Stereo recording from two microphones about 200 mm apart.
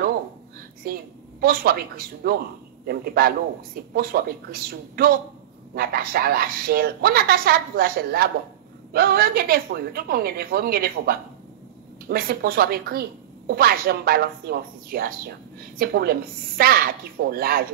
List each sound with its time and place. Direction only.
0.8 s speech: 45° right (ahead or behind)